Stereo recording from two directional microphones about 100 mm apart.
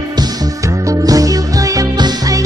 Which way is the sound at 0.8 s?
35° right (ahead or behind).